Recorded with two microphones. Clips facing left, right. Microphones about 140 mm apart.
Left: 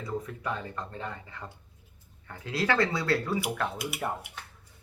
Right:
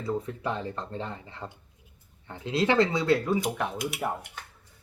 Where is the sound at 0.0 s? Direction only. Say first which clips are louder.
Right 4 dB; 30° right (ahead or behind).